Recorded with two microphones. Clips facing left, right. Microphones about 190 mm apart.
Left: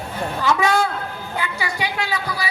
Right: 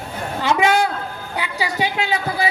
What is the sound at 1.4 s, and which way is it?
Speech, 20° right (ahead or behind).